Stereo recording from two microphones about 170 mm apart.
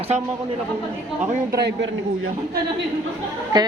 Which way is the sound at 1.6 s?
90° right.